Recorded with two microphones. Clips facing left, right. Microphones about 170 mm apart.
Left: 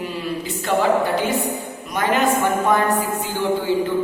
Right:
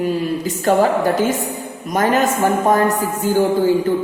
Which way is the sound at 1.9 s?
40° right (ahead or behind).